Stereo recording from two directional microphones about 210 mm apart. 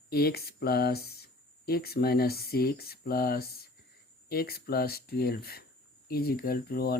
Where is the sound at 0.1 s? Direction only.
45° left (ahead or behind).